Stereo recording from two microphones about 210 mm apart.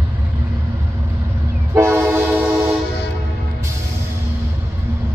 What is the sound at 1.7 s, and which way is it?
Train, 10° right (ahead or behind).